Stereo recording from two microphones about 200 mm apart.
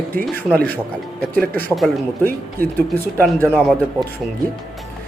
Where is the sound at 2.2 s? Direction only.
45° right (ahead or behind).